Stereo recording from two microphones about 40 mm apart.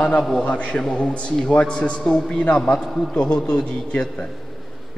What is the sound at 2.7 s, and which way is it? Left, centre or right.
A man's voice, left.